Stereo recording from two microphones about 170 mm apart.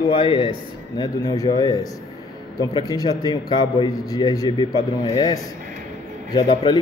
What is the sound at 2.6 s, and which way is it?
A man's voice, 25° left (ahead or behind).